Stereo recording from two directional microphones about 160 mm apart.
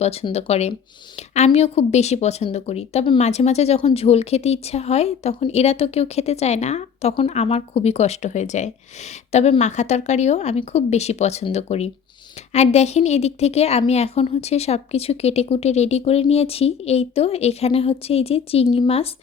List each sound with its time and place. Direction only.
0.0 s a woman's voice: 40° left (ahead or behind)